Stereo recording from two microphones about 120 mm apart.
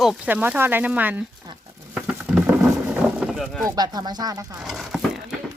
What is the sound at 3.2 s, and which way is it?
Boat, 5° right (ahead or behind).